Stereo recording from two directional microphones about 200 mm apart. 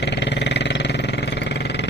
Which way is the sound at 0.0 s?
60° left (ahead or behind).